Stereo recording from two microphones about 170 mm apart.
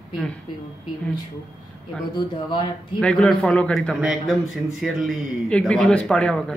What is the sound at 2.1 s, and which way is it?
Speech, 25° left (ahead or behind).